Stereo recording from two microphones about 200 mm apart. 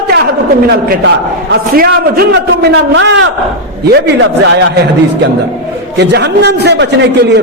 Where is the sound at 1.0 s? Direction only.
55° right (ahead or behind).